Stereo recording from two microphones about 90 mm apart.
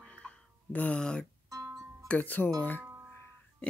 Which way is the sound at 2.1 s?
20° left (ahead or behind).